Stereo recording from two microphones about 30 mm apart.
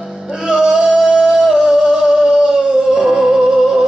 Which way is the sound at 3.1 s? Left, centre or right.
Centre.